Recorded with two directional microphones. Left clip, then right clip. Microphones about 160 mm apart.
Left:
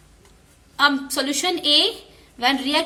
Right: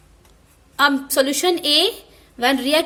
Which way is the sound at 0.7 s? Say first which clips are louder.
Right 3 dB; 40° right (ahead or behind).